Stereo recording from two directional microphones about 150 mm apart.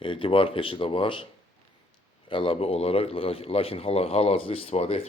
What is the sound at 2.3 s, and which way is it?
Speech, 35° left (ahead or behind).